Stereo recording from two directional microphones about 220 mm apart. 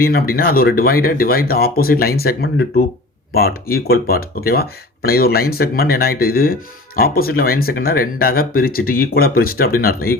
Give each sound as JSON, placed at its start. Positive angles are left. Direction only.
{"t": 0.0, "sound": "speech", "side_deg": 40}